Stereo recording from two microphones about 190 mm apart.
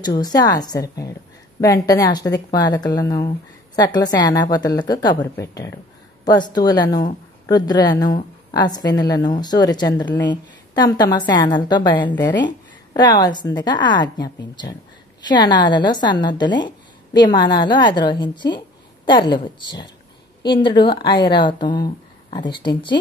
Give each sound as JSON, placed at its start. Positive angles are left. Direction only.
{"t": 0.0, "sound": "a woman's voice", "side_deg": 20}